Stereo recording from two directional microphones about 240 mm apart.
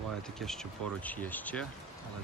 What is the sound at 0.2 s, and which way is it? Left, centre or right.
Speech, centre.